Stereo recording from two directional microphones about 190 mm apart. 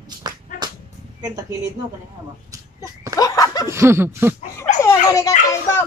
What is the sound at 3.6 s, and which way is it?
Speech, 15° right (ahead or behind).